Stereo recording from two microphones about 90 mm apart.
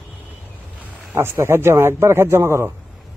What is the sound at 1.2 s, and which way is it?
A man's voice, 30° right (ahead or behind).